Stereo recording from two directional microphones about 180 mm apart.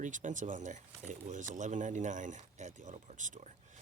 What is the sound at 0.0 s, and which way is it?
Speech, 45° right (ahead or behind).